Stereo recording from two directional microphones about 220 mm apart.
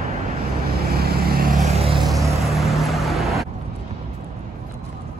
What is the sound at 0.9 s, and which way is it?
Vehicle, 45° right (ahead or behind).